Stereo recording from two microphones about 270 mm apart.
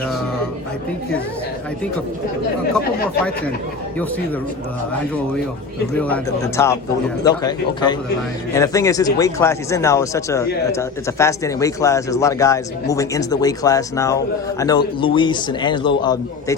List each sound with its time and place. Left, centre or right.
6.0 s speech: centre